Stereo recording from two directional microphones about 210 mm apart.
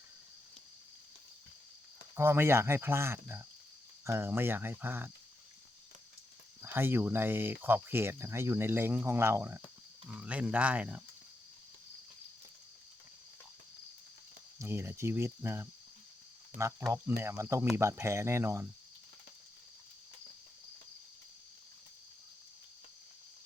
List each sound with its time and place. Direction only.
2.1 s speech: 10° right (ahead or behind)
6.6 s speech: 10° right (ahead or behind)
14.6 s speech: 15° right (ahead or behind)
16.5 s speech: 40° right (ahead or behind)
17.2 s speech: 15° right (ahead or behind)